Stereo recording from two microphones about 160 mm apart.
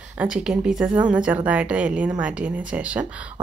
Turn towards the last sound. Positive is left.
turn(degrees=-10)  # may be behind; listen again after turning